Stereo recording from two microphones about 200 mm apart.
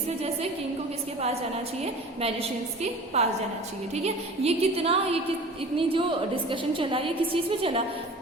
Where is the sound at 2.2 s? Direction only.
30° right (ahead or behind).